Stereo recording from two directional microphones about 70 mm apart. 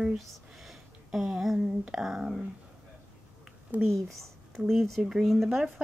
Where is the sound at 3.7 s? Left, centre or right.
Right.